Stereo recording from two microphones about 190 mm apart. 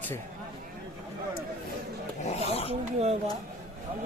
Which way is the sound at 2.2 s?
30° left (ahead or behind).